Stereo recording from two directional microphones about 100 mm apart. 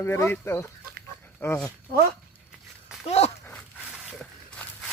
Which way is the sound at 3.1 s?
90° left.